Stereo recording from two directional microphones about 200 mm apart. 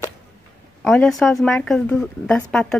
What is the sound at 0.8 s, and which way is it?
Speech, centre (ahead or behind).